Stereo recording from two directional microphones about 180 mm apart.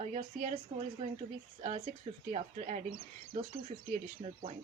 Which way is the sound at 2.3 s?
40° right (ahead or behind).